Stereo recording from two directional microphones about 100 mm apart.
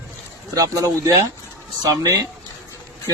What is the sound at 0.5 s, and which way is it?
Speech, 35° right (ahead or behind).